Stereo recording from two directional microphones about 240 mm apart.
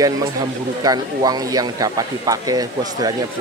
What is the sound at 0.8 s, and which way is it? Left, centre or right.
Speech, centre.